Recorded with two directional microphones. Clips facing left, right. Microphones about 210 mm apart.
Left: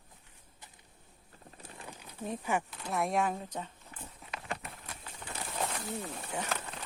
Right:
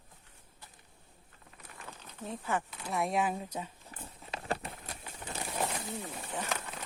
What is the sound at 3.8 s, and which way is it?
Horse, 30° right (ahead or behind).